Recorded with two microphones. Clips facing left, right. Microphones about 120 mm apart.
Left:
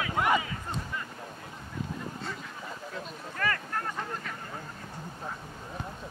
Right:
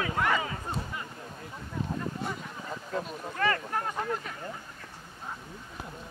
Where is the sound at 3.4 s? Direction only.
25° right (ahead or behind).